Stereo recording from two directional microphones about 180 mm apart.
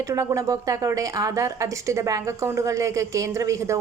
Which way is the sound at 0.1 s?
15° right (ahead or behind).